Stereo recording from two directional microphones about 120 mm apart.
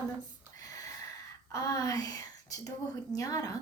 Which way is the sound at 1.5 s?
30° left (ahead or behind).